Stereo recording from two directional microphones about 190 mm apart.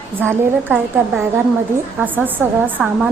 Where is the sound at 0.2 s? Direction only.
5° right (ahead or behind).